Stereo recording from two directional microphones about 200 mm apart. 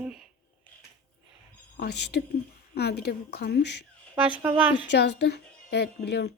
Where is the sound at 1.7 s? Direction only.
55° left (ahead or behind).